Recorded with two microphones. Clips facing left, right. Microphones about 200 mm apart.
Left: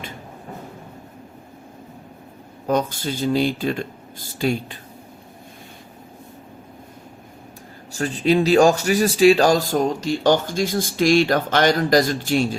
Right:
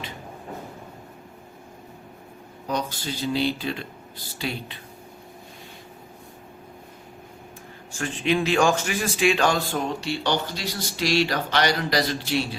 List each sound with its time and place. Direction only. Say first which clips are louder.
2.6 s speech: left 7 dB; 50° left (ahead or behind)
7.9 s speech: left 6 dB; 40° left (ahead or behind)